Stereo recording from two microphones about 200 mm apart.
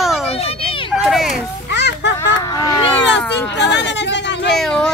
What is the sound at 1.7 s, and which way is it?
Children playing, 60° left (ahead or behind).